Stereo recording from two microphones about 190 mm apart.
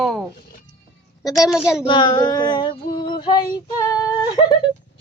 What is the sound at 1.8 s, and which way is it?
Female singing, 25° left (ahead or behind).